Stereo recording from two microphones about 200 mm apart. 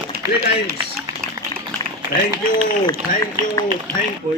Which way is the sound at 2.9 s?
15° left (ahead or behind).